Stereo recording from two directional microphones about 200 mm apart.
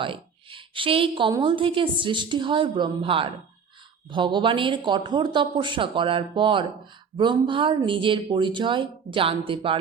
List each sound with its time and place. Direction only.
0.0 s a woman's voice: 25° right (ahead or behind)